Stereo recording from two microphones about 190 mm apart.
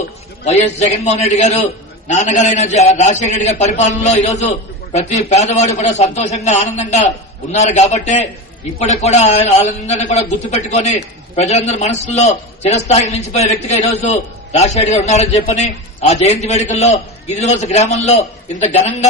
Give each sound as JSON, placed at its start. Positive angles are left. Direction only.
{"t": 0.4, "sound": "a man's voice", "side_deg": 35}